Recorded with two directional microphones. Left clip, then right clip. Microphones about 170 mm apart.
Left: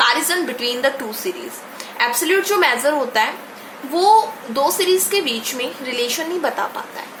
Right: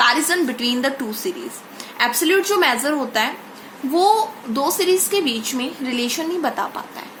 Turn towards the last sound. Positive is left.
turn(degrees=-30)  # may be behind; listen again after turning